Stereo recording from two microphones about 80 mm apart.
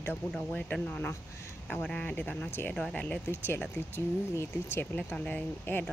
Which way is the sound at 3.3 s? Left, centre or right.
Left.